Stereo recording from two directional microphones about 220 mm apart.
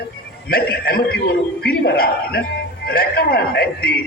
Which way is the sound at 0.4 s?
45° left (ahead or behind).